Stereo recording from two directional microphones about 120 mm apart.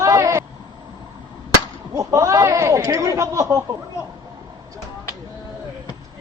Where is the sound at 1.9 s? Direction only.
25° right (ahead or behind).